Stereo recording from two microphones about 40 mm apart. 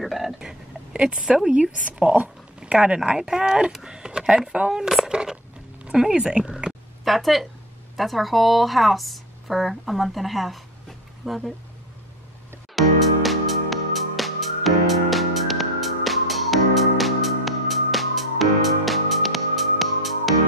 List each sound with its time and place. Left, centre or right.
0.0 s a woman's voice: centre
0.9 s speech: right
3.2 s speech: centre
7.1 s a woman's voice: centre
12.7 s music: centre